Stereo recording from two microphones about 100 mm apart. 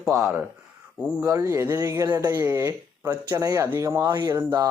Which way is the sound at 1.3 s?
30° right (ahead or behind).